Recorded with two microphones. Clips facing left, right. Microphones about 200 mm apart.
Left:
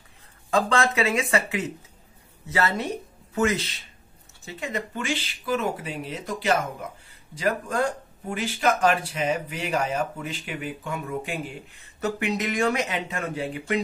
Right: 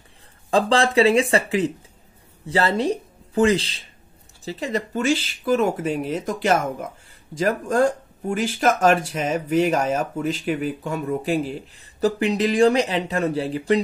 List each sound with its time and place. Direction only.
0.5 s speech: 30° right (ahead or behind)